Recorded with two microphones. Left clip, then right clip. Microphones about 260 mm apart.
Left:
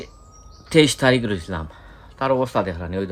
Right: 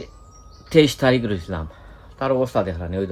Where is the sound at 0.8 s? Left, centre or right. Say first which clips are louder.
Even; left.